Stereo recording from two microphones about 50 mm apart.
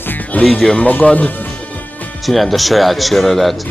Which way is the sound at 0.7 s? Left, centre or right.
Left.